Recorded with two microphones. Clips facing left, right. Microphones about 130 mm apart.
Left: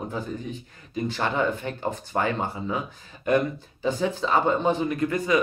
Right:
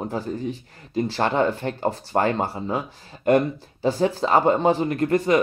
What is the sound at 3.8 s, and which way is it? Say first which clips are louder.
Speech: right 4 dB; 40° right (ahead or behind).